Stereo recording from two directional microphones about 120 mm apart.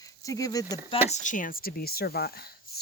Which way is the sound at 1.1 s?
90° left.